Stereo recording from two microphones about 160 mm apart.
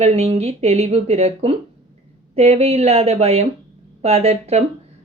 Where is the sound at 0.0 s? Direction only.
40° right (ahead or behind).